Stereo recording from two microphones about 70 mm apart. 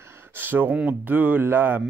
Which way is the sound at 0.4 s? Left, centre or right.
Right.